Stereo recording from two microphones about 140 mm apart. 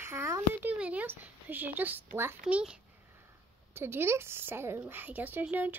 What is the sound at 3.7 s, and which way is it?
A woman's voice, 15° right (ahead or behind).